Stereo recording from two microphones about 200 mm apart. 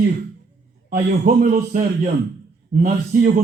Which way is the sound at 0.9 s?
40° right (ahead or behind).